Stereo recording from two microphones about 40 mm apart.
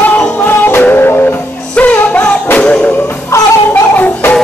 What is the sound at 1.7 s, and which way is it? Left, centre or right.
Music, left.